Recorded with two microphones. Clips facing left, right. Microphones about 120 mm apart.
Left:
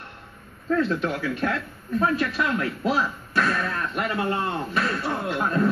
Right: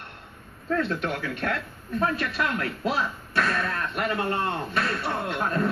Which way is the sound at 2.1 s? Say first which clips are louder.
Left 3 dB; 25° left (ahead or behind).